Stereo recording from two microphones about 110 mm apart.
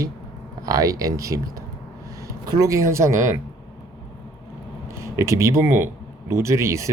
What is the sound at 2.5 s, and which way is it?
Speech, 30° right (ahead or behind).